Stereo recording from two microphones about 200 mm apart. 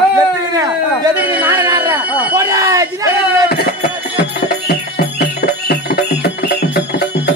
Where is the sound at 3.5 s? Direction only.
50° left (ahead or behind).